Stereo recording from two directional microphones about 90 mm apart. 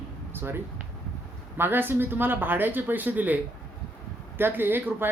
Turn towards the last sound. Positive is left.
turn(degrees=-25)  # may be behind; listen again after turning